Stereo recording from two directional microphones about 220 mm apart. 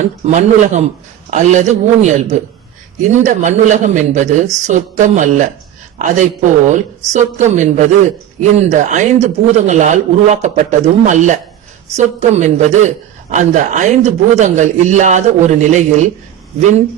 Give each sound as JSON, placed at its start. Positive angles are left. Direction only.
{"t": 0.3, "sound": "a man's voice", "side_deg": -30}